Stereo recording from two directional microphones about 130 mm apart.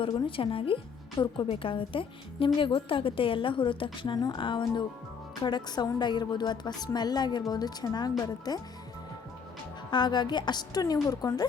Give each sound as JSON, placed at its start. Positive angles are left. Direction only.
{"t": 0.3, "sound": "a woman's voice", "side_deg": 45}
{"t": 9.9, "sound": "a woman's voice", "side_deg": 35}